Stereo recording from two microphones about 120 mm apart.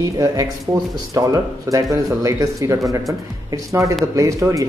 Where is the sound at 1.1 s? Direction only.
30° right (ahead or behind).